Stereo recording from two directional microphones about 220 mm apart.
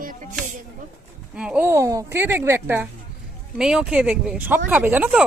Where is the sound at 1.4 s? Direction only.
5° right (ahead or behind).